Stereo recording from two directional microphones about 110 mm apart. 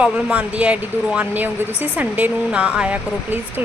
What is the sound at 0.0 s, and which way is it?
A woman's voice, 10° right (ahead or behind).